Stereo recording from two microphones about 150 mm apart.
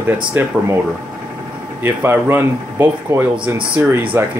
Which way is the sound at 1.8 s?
15° right (ahead or behind).